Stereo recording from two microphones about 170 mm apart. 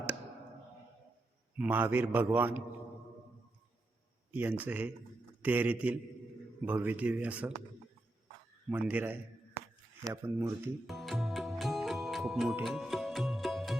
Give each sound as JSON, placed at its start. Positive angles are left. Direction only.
{"t": 1.5, "sound": "a man's voice", "side_deg": -10}
{"t": 4.3, "sound": "a man's voice", "side_deg": -10}
{"t": 8.7, "sound": "a man's voice", "side_deg": -10}
{"t": 9.6, "sound": "a sound", "side_deg": -15}
{"t": 10.8, "sound": "music", "side_deg": 0}